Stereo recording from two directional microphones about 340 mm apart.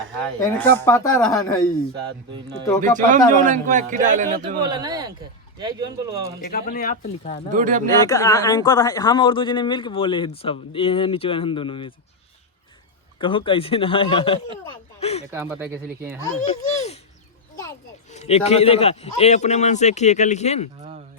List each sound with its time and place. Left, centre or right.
0.3 s a man's voice: centre
3.4 s a man's voice: right
4.6 s speech: centre
6.4 s a man's voice: left
7.5 s a man's voice: right
8.0 s a man's voice: centre
13.1 s a man's voice: centre
15.3 s speech: centre
16.4 s a sound: centre
18.1 s a man's voice: centre